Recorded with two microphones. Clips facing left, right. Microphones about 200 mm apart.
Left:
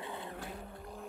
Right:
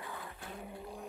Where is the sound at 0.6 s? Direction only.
10° right (ahead or behind).